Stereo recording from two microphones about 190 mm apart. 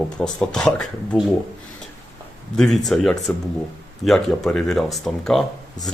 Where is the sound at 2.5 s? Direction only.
Centre (ahead or behind).